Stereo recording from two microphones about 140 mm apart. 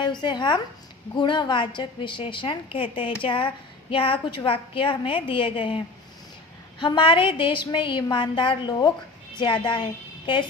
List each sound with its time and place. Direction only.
0.0 s a woman's voice: 35° left (ahead or behind)